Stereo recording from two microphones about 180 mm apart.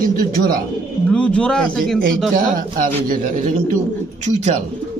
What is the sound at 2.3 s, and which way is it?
Speech, 50° right (ahead or behind).